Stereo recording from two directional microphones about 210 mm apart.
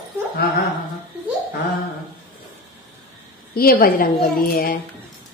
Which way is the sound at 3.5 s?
45° left (ahead or behind).